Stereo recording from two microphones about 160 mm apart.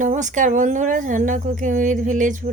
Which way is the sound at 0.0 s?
50° right (ahead or behind).